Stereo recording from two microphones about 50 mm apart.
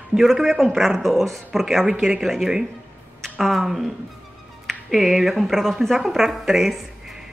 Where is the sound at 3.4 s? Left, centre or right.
Centre.